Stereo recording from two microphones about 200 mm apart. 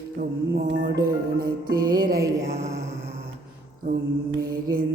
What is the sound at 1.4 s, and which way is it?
Music, 45° right (ahead or behind).